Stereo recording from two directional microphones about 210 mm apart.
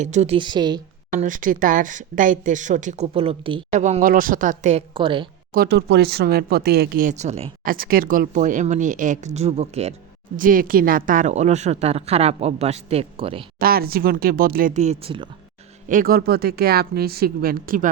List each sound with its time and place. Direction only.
0.0 s a woman's voice: 35° right (ahead or behind)
1.1 s speech: 35° right (ahead or behind)
5.5 s speech: 50° right (ahead or behind); by 9.9 s 30° right (ahead or behind)
10.3 s speech: 40° right (ahead or behind); by 13.4 s 25° right (ahead or behind)
13.6 s speech: 45° right (ahead or behind); by 15.3 s 25° right (ahead or behind)
15.9 s speech: 40° right (ahead or behind)